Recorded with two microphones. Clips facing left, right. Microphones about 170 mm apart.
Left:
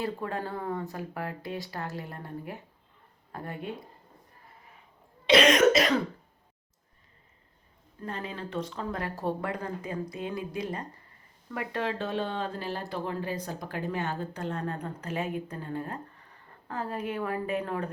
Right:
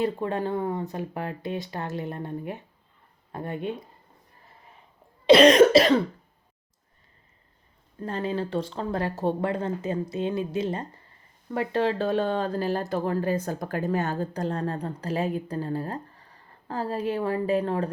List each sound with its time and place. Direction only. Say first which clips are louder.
0.0 s speech: right 6 dB; 20° right (ahead or behind)
5.2 s cough: right 6 dB; 35° right (ahead or behind)
8.0 s speech: right 8 dB; 30° right (ahead or behind)